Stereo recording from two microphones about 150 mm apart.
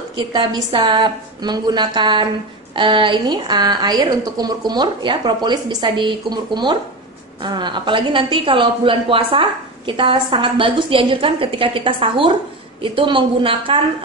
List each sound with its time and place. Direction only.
0.2 s a woman's voice: 35° right (ahead or behind)